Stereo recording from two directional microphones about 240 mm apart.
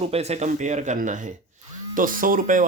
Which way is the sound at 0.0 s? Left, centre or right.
Right.